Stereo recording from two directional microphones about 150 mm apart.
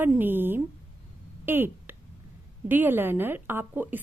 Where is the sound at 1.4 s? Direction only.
15° right (ahead or behind).